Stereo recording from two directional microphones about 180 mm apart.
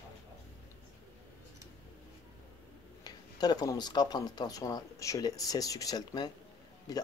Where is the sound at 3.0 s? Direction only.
20° left (ahead or behind).